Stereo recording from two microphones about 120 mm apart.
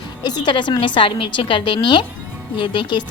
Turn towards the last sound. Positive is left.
turn(degrees=40)  # may be behind; listen again after turning